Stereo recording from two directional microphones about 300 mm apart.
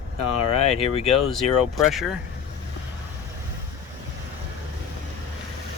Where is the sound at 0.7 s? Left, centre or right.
Left.